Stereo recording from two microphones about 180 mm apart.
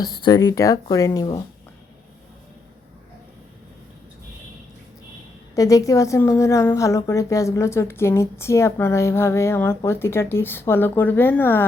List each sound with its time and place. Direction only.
0.3 s speech: 15° left (ahead or behind)
5.5 s a woman's voice: 20° left (ahead or behind)